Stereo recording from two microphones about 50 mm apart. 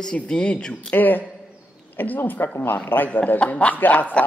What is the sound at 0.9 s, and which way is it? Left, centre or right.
A man's voice, left.